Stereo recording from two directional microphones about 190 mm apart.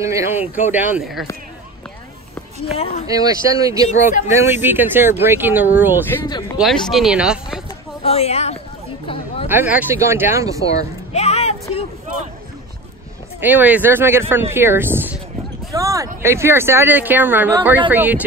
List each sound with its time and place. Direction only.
0.0 s speech: 15° right (ahead or behind)
2.6 s speech: 30° left (ahead or behind)
3.1 s speech: 20° right (ahead or behind)
6.2 s speech: 20° left (ahead or behind)
6.6 s speech: centre (ahead or behind)
8.0 s speech: 30° left (ahead or behind)
9.0 s chatter: 30° left (ahead or behind)
9.5 s speech: 10° right (ahead or behind)
11.1 s a sound: 35° left (ahead or behind)
13.4 s speech: 10° right (ahead or behind)
15.7 s a sound: 15° right (ahead or behind)
16.2 s speech: 15° right (ahead or behind)